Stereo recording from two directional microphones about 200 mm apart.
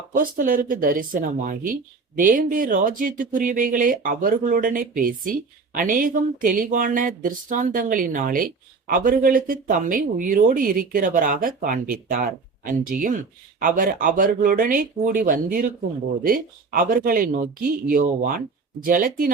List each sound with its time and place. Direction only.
0.2 s speech: 45° right (ahead or behind)